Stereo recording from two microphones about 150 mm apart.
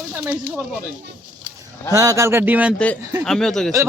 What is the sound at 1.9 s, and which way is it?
Speech, 20° right (ahead or behind).